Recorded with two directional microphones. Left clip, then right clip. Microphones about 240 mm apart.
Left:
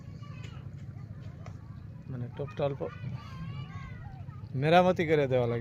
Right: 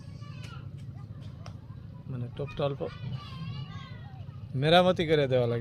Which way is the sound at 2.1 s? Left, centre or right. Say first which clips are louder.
Right 1 dB; centre.